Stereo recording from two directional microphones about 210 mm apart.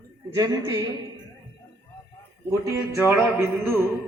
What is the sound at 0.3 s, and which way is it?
Speech, 15° right (ahead or behind).